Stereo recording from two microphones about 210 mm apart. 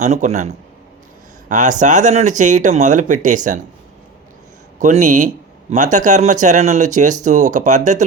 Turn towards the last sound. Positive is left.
turn(degrees=-35)  # may be behind; listen again after turning